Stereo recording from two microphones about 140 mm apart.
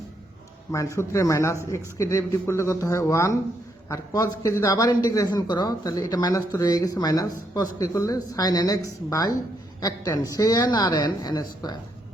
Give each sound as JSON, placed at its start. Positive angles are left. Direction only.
{"t": 0.7, "sound": "speech", "side_deg": 20}